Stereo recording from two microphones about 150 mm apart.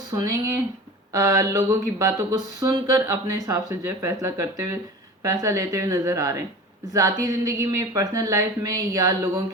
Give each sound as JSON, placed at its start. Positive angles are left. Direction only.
{"t": 0.1, "sound": "speech", "side_deg": -25}